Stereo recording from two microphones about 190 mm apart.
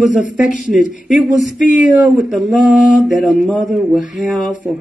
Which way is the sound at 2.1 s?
Centre (ahead or behind).